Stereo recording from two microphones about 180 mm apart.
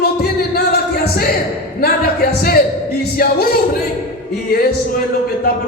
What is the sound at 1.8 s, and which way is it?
Speech, 60° left (ahead or behind).